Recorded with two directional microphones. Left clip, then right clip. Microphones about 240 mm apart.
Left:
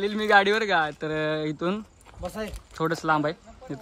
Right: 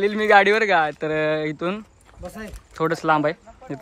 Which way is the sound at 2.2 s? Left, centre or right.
Centre.